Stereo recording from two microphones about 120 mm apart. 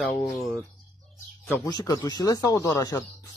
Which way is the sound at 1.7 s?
30° left (ahead or behind).